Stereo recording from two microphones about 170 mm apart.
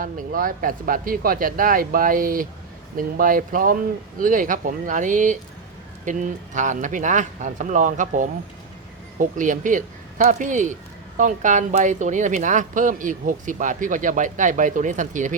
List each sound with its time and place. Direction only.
0.0 s a woman's voice: 55° right (ahead or behind)